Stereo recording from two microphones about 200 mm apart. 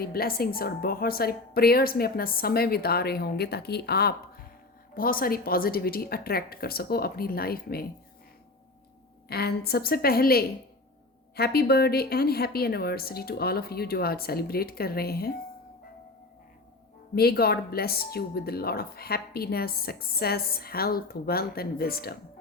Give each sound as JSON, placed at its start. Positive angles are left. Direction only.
{"t": 0.0, "sound": "speech", "side_deg": 50}
{"t": 9.3, "sound": "speech", "side_deg": 50}
{"t": 17.2, "sound": "speech", "side_deg": 50}